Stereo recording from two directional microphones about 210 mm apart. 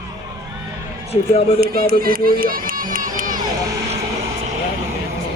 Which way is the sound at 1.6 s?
45° right (ahead or behind).